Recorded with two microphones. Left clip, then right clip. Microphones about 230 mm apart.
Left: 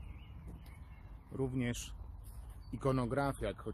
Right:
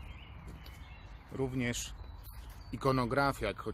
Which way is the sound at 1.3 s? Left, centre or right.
Centre.